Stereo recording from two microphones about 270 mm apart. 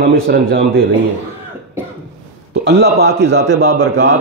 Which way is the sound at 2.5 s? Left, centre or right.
Right.